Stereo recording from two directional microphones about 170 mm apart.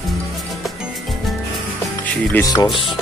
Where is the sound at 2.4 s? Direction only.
25° left (ahead or behind).